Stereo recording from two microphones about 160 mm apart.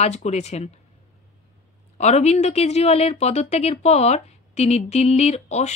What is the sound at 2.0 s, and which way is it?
Speech, 45° left (ahead or behind).